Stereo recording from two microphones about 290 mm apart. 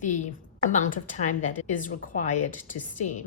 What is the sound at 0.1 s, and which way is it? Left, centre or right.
A woman's voice, left.